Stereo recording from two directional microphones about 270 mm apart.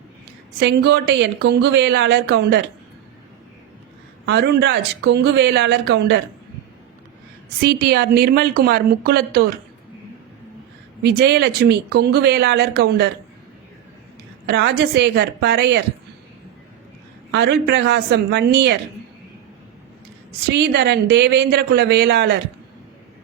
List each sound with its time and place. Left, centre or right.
0.6 s speech: right
4.3 s speech: right
7.6 s speech: right
11.0 s speech: right
14.4 s speech: right
17.3 s speech: right
20.5 s speech: right